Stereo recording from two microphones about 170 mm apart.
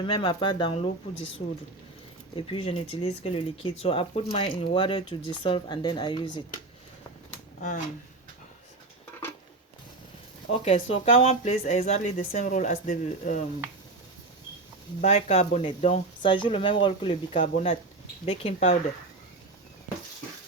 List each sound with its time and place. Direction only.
0.0 s speech: 30° left (ahead or behind)
2.3 s speech: 30° left (ahead or behind)
10.5 s speech: 40° left (ahead or behind)
15.0 s speech: 40° left (ahead or behind)
17.4 s speech: 45° left (ahead or behind)